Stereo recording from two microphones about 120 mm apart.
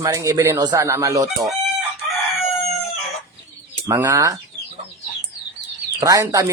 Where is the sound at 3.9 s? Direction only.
25° right (ahead or behind).